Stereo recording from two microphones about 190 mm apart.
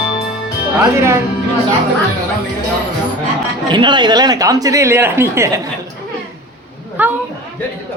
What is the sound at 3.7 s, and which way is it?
Speech, 25° right (ahead or behind).